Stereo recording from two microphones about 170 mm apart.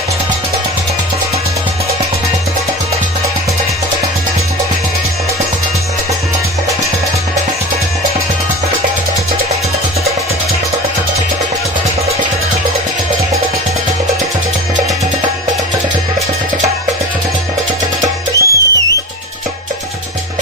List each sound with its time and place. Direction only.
18.0 s music: 20° right (ahead or behind)